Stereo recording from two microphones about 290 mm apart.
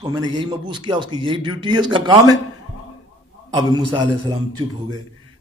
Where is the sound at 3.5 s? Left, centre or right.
Centre.